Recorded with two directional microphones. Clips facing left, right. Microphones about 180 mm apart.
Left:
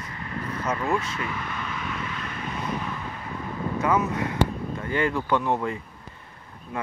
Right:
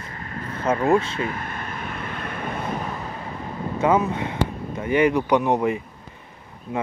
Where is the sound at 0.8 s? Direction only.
30° right (ahead or behind).